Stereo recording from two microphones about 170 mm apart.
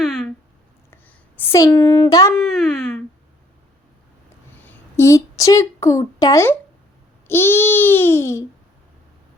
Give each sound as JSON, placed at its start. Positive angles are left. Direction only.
{"t": 0.9, "sound": "speech", "side_deg": 10}
{"t": 2.3, "sound": "speech", "side_deg": 5}
{"t": 4.6, "sound": "speech", "side_deg": 15}
{"t": 7.3, "sound": "babbling", "side_deg": 15}